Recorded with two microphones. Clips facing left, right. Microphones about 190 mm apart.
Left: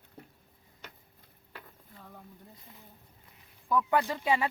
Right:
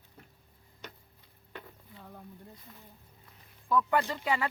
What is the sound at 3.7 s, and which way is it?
Speech, 10° left (ahead or behind).